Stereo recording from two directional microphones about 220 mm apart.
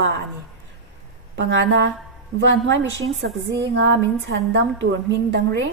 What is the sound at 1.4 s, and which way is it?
A woman's voice, 55° right (ahead or behind).